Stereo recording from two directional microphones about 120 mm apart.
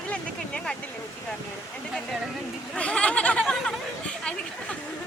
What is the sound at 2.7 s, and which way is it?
Speech, 10° left (ahead or behind).